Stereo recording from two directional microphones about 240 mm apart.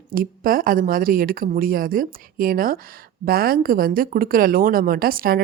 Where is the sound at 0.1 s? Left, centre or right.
Right.